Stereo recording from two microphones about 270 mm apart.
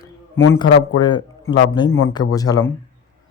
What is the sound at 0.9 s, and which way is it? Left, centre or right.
Speech, centre.